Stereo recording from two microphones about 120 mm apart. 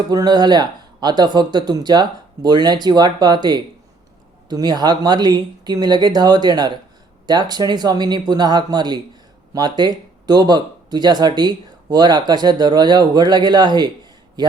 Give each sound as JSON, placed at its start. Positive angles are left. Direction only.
{"t": 0.1, "sound": "speech", "side_deg": -35}